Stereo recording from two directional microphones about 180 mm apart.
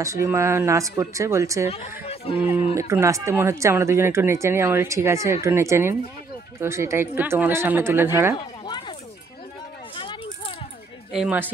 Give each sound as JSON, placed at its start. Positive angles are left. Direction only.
{"t": 0.0, "sound": "speech", "side_deg": -15}
{"t": 2.0, "sound": "speech", "side_deg": 30}
{"t": 2.7, "sound": "speech", "side_deg": -15}
{"t": 8.4, "sound": "a sound", "side_deg": 25}
{"t": 9.9, "sound": "a sound", "side_deg": 30}
{"t": 11.1, "sound": "a man's voice", "side_deg": -5}